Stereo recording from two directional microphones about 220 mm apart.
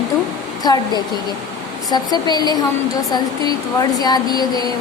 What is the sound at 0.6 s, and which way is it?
Speech, 15° left (ahead or behind).